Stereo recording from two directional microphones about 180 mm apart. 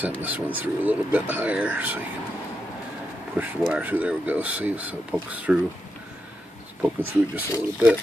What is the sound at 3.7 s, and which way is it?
Speech, 10° right (ahead or behind).